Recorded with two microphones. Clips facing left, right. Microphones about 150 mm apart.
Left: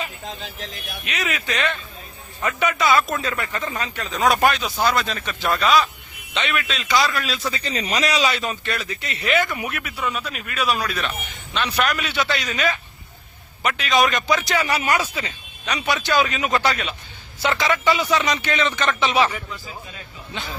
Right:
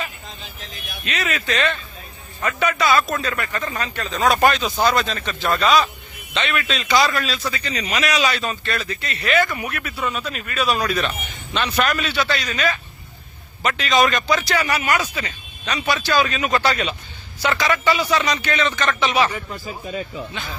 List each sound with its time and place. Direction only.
1.0 s a man's voice: 15° left (ahead or behind)
7.5 s speech: 35° left (ahead or behind)
8.4 s speech: 15° left (ahead or behind)
10.0 s a man's voice: 5° left (ahead or behind)
14.8 s speech: 30° left (ahead or behind)
15.0 s speech: 10° left (ahead or behind)
16.6 s a man's voice: centre (ahead or behind)
17.6 s speech: 20° left (ahead or behind)
19.5 s speech: 50° right (ahead or behind)